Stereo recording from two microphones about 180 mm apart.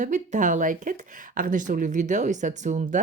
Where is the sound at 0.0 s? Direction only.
45° right (ahead or behind).